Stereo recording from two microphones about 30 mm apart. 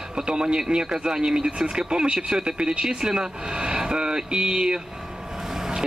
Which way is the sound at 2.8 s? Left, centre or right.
Centre.